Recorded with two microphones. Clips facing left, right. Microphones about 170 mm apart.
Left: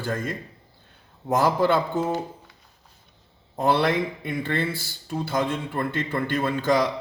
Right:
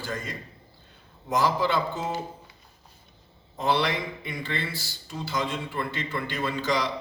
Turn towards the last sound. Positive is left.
turn(degrees=50)  # may be behind; listen again after turning